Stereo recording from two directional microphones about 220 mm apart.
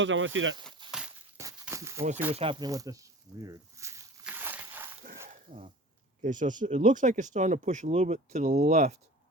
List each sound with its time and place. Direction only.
0.0 s speech: 60° right (ahead or behind)
0.9 s a sound: 5° right (ahead or behind)
2.3 s snake: 25° right (ahead or behind); by 4.9 s 10° right (ahead or behind)
5.3 s sneeze: 30° right (ahead or behind)
6.2 s speech: 35° right (ahead or behind)